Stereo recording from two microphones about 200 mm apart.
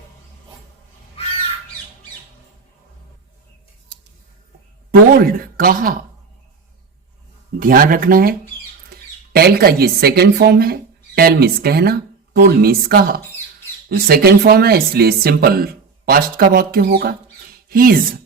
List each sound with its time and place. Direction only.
4.9 s speech: 45° right (ahead or behind)
7.6 s speech: 45° right (ahead or behind)